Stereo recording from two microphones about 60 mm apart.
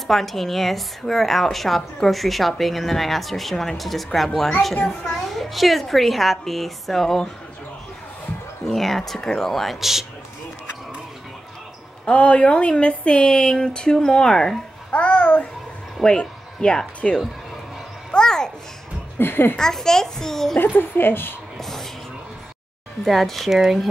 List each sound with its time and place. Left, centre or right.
0.0 s a woman's voice: centre
8.6 s a woman's voice: centre
12.1 s speech: left
15.0 s babbling: left
16.0 s speech: centre
18.1 s a sound: centre
19.1 s a woman's voice: left
19.5 s speech: centre
20.5 s a woman's voice: left
21.5 s music: centre
23.0 s a woman's voice: centre